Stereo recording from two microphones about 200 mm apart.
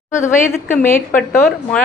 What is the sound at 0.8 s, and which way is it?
Speech, 40° left (ahead or behind).